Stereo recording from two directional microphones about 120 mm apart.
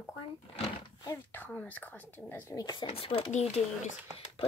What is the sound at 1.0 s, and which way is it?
Speech, 15° left (ahead or behind).